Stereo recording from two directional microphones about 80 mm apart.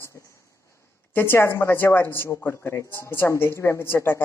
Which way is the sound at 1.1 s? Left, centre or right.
Left.